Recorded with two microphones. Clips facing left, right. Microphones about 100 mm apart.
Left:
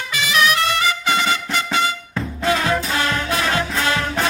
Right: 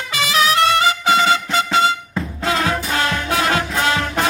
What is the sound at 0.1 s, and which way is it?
Music, 30° right (ahead or behind).